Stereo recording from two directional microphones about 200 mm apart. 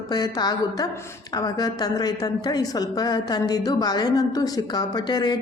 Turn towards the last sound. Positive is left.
turn(degrees=20)  # may be behind; listen again after turning